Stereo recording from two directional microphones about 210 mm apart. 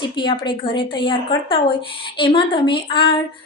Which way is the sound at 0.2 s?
25° left (ahead or behind).